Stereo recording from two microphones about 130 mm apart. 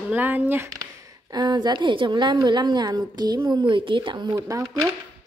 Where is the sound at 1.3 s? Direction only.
35° right (ahead or behind).